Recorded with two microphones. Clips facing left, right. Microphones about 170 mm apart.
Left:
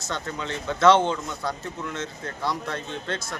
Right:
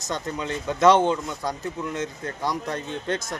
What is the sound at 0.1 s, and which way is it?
Speech, 15° right (ahead or behind).